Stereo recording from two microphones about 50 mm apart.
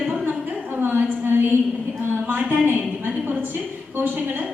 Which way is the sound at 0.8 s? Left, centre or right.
Right.